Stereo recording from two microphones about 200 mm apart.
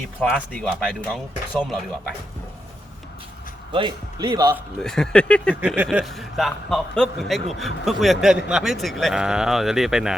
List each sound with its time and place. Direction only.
0.2 s a man's voice: 5° left (ahead or behind)
3.7 s speech: 25° right (ahead or behind)
4.8 s a man's voice: 5° left (ahead or behind)
5.5 s a man's voice: 5° right (ahead or behind)